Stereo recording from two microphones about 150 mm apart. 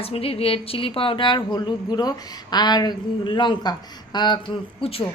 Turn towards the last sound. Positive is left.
turn(degrees=40)  # may be behind; listen again after turning